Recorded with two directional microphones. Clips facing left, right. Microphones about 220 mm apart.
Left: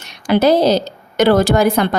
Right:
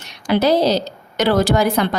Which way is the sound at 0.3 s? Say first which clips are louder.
Left 3 dB; 50° left (ahead or behind).